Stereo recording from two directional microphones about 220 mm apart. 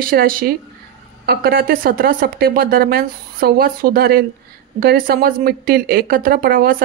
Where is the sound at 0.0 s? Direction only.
40° right (ahead or behind).